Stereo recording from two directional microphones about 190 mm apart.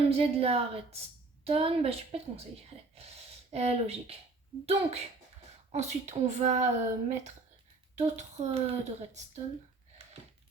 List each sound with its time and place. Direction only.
0.1 s speech: 30° right (ahead or behind)